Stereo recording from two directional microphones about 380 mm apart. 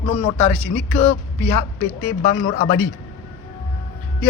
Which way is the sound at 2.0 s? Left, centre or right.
Centre.